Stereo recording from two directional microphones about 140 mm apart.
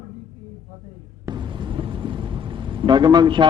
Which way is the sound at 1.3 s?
35° right (ahead or behind).